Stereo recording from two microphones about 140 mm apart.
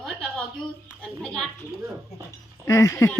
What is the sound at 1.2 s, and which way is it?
Speech, 5° left (ahead or behind).